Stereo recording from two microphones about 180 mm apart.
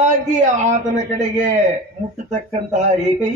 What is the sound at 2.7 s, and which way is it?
Speech, 40° right (ahead or behind).